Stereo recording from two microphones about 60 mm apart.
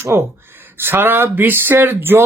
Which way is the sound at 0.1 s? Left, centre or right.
Right.